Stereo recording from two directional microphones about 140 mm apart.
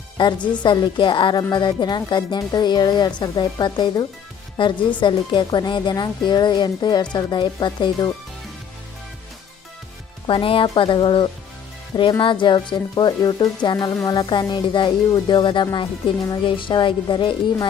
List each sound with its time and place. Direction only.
0.2 s speech: 35° left (ahead or behind)
10.2 s speech: 40° left (ahead or behind)